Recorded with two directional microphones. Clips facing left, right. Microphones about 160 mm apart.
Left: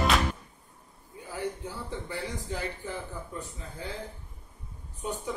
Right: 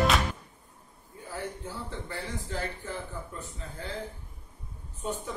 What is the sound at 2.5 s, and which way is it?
Speech, 15° left (ahead or behind).